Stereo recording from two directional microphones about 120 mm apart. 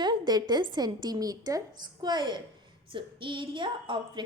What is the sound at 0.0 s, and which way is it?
A woman's voice, 35° right (ahead or behind).